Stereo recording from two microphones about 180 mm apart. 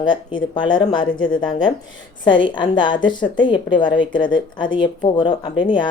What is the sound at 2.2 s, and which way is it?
Speech, 25° left (ahead or behind).